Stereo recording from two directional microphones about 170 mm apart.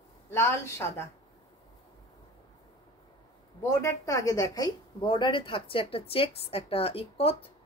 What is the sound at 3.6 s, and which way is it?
Speech, 20° left (ahead or behind).